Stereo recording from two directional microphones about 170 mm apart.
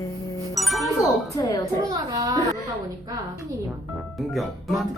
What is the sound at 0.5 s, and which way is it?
Speech, centre (ahead or behind).